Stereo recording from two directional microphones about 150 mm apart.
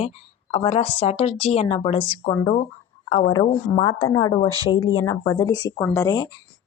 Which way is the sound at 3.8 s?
25° left (ahead or behind).